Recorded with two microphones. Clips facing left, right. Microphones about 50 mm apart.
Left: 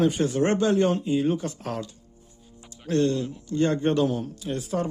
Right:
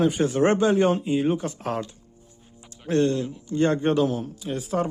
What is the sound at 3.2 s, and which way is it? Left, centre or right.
Speech, centre.